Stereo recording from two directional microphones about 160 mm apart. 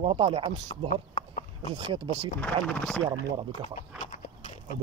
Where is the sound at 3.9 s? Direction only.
50° left (ahead or behind).